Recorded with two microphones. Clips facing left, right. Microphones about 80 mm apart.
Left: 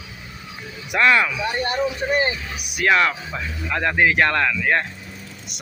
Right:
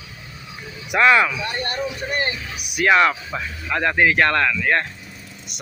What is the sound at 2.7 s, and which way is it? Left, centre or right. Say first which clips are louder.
Speech: right 2 dB; centre.